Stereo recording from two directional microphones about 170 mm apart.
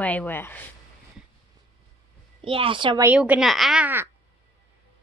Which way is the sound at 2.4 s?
30° right (ahead or behind).